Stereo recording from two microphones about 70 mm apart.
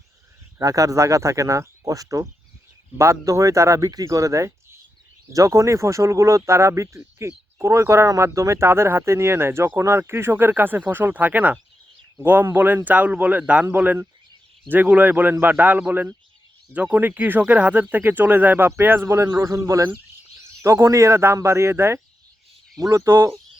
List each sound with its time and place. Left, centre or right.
0.6 s speech: right
8.0 s speech: right
19.0 s speech: right
20.6 s a man's voice: right